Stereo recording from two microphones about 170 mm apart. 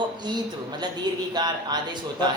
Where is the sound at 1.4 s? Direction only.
25° right (ahead or behind).